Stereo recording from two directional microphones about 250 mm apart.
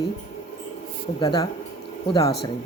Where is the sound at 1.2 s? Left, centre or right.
Centre.